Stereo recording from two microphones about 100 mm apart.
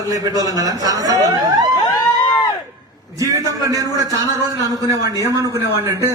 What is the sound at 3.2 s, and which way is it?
A man's voice, 35° right (ahead or behind).